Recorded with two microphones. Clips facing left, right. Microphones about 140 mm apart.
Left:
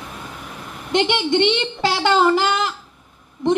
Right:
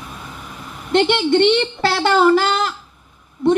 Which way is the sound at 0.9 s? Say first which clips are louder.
Right 3 dB; 15° left (ahead or behind).